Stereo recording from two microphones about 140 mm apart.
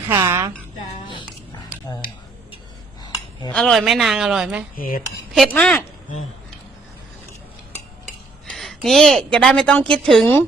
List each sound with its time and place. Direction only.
0.1 s a woman's voice: 15° right (ahead or behind)
3.5 s a woman's voice: 5° left (ahead or behind)
4.8 s speech: 90° left
5.3 s speech: 5° left (ahead or behind)
8.4 s a woman's voice: centre (ahead or behind)